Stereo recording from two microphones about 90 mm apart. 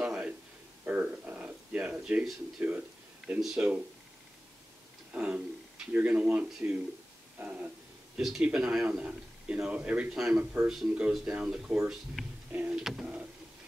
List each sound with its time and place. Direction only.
0.0 s a sound: 10° right (ahead or behind)
2.6 s a man's voice: 20° right (ahead or behind)
3.3 s a man's voice: 5° right (ahead or behind)
5.1 s a man's voice: 15° right (ahead or behind)